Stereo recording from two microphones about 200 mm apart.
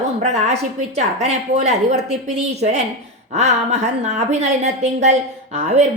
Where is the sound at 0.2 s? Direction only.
35° right (ahead or behind).